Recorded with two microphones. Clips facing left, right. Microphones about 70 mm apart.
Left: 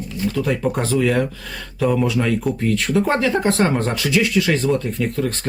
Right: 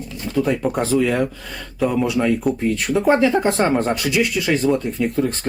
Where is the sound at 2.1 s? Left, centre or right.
Centre.